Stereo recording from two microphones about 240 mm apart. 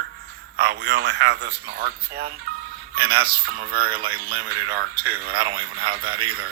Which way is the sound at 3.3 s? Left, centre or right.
Right.